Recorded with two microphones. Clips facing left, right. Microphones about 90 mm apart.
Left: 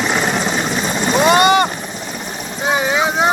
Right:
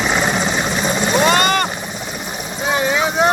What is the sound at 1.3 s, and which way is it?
Helicopter, 15° left (ahead or behind).